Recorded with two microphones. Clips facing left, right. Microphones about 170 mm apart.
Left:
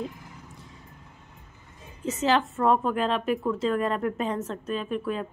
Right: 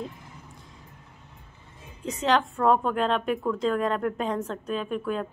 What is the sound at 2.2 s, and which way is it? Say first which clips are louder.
A woman's voice: right 1 dB; centre (ahead or behind).